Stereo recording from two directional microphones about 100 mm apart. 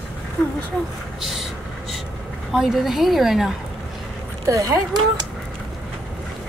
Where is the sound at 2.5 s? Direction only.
5° right (ahead or behind).